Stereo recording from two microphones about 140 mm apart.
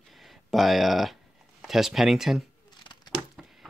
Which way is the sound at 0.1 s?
Centre (ahead or behind).